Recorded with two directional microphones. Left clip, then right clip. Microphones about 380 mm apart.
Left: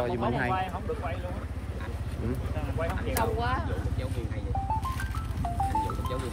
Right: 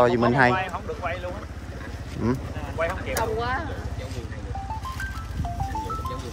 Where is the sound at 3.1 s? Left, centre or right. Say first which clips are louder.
Right 3 dB; right.